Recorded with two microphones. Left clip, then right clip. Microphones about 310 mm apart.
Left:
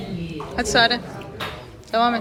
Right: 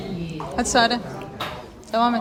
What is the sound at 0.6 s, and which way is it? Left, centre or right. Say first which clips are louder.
A woman's voice: left 1 dB; centre.